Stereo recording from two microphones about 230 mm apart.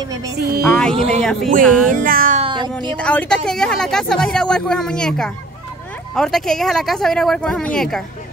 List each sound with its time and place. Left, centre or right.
0.7 s speech: centre
0.9 s speech: right
1.6 s speech: centre
1.9 s music: right
3.0 s speech: centre